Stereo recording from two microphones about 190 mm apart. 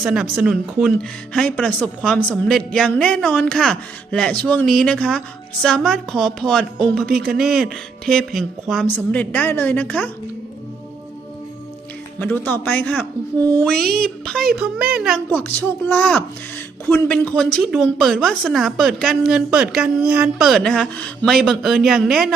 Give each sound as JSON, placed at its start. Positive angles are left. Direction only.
{"t": 0.0, "sound": "a woman's voice", "side_deg": -5}
{"t": 12.2, "sound": "a woman's voice", "side_deg": 10}